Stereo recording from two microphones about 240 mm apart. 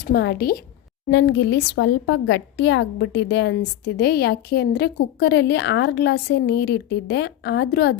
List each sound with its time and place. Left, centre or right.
0.0 s a woman's voice: left